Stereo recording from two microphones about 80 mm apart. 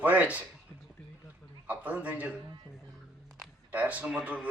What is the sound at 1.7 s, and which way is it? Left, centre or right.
Speech, centre.